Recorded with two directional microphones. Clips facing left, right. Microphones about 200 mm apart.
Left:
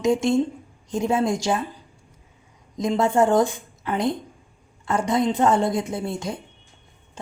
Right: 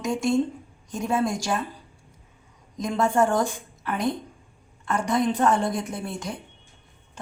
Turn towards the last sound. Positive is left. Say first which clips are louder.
# left 4 dB
turn(degrees=25)  # may be behind; listen again after turning